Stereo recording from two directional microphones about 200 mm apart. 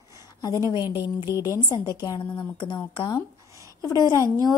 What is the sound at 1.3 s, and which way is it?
A woman's voice, 15° left (ahead or behind).